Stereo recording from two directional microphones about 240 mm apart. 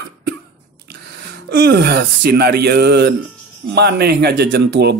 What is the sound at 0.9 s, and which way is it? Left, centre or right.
A man's voice, right.